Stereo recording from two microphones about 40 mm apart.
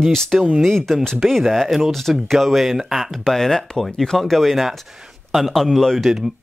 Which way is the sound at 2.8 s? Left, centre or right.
Centre.